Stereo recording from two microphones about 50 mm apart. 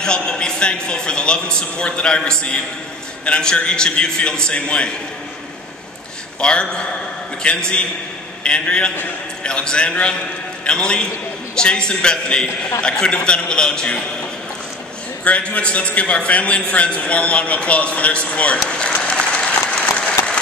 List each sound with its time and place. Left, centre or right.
0.0 s a man's voice: centre
6.4 s a man's voice: centre
15.2 s a man's voice: left